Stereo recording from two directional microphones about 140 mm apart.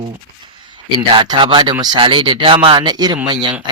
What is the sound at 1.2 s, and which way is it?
Speech, 35° right (ahead or behind).